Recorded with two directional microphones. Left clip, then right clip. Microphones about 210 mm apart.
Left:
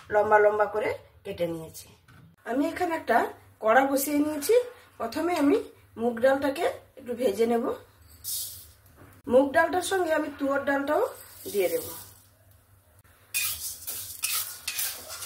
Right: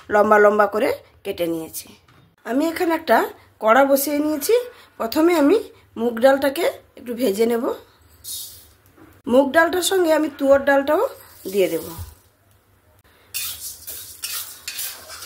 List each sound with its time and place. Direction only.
0.1 s speech: 50° right (ahead or behind)
9.2 s speech: 50° right (ahead or behind)